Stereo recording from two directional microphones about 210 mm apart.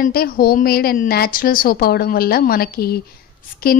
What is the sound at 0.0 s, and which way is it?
A woman's voice, 45° left (ahead or behind).